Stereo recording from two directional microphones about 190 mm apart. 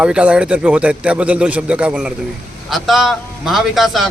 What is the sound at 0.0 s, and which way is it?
A man's voice, 5° right (ahead or behind).